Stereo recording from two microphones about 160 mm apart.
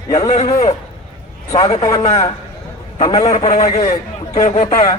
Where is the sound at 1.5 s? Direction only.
25° left (ahead or behind).